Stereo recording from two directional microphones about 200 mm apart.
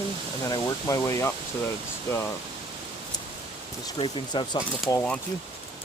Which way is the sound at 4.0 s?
25° left (ahead or behind).